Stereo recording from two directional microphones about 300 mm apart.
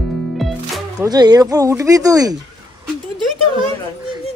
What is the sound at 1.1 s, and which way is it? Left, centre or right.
Speech, centre.